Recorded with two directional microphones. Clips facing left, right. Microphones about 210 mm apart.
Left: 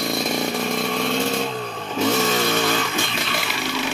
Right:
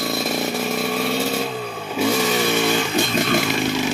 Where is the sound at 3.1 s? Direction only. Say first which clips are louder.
Right 8 dB; 45° right (ahead or behind).